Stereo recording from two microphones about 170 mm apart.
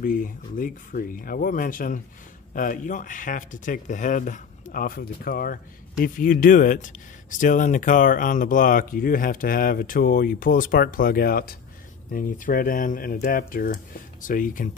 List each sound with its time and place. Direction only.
0.0 s speech: 55° left (ahead or behind)